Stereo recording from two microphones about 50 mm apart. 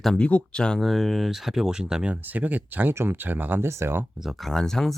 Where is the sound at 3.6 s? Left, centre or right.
Right.